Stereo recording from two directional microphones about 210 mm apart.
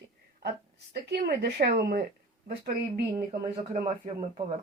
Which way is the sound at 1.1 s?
50° right (ahead or behind).